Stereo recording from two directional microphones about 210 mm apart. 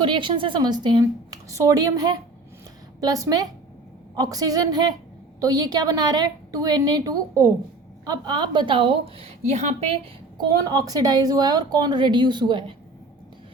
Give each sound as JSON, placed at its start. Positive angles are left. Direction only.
{"t": 0.0, "sound": "a woman's voice", "side_deg": -25}